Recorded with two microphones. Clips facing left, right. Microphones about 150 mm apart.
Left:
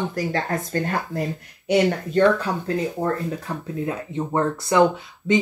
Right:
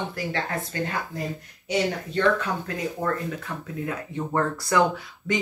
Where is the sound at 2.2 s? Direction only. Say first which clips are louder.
Left 5 dB; 35° left (ahead or behind).